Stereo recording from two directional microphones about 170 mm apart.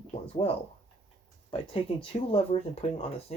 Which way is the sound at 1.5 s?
35° left (ahead or behind).